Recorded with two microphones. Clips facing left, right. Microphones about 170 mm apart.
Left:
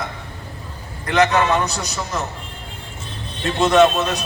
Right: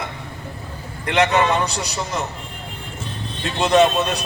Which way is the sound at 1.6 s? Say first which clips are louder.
Even; 30° right (ahead or behind).